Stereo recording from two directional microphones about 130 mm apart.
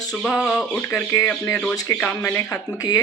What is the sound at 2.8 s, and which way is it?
Speech, 30° left (ahead or behind).